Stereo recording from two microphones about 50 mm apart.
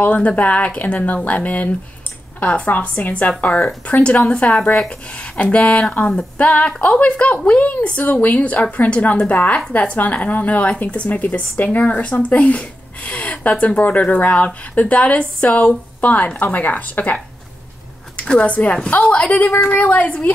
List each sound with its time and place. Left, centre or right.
0.0 s a woman's voice: left
18.2 s speech: left